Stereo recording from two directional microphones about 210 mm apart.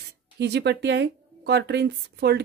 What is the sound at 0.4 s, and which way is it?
A woman's voice, 55° right (ahead or behind).